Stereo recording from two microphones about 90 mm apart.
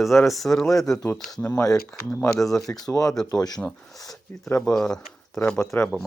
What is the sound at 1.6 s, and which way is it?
Speech, 40° left (ahead or behind).